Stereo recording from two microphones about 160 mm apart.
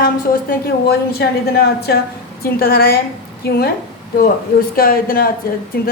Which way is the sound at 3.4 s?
90° left.